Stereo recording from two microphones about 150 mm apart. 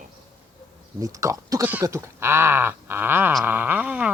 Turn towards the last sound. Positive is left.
turn(degrees=-10)  # may be behind; listen again after turning